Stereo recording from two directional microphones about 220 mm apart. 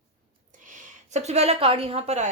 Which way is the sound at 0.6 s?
35° right (ahead or behind).